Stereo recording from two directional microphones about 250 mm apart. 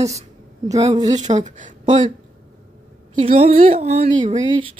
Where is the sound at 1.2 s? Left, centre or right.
Right.